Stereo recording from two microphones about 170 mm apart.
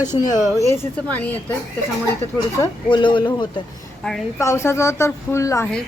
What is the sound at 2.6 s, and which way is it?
Speech, 25° left (ahead or behind).